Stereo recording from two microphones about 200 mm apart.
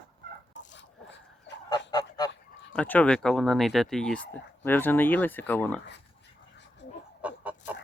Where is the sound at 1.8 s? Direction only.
20° left (ahead or behind).